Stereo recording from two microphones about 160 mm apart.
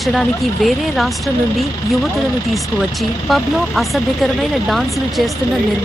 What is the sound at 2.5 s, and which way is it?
Speech, centre (ahead or behind).